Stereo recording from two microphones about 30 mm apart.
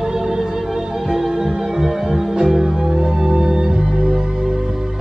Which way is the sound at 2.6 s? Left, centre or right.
Right.